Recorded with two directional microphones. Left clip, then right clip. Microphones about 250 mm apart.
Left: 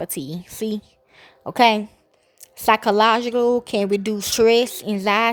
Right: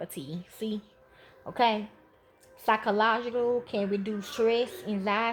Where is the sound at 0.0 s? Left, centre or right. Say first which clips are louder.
Left 10 dB; left.